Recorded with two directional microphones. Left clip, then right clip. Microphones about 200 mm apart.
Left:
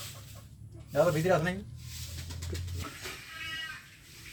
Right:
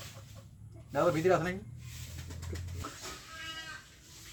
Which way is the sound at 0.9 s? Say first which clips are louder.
Left 2 dB; 50° right (ahead or behind).